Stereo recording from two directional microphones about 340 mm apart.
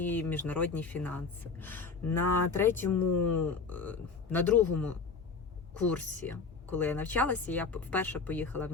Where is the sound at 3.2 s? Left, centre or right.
Centre.